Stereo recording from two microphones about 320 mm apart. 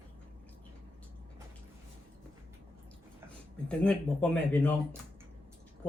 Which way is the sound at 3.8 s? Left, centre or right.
Centre.